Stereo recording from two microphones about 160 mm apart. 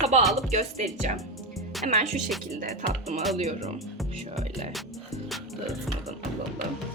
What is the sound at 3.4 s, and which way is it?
A woman's voice, 45° right (ahead or behind).